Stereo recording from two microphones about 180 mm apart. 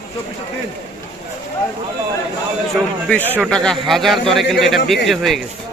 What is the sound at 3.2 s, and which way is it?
Speech, 10° right (ahead or behind).